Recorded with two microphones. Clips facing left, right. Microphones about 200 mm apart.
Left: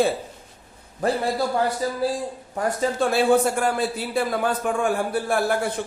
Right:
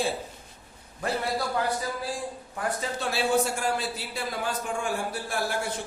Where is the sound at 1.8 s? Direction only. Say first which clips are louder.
Left 7 dB; 35° left (ahead or behind).